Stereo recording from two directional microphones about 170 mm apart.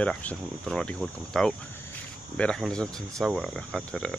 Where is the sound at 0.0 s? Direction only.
10° left (ahead or behind).